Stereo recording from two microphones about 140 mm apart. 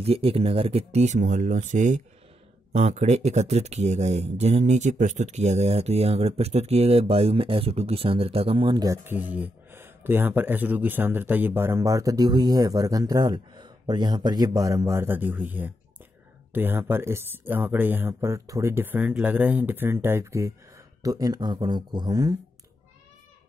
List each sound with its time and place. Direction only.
0.0 s speech: 45° right (ahead or behind)
8.8 s speech: 20° right (ahead or behind)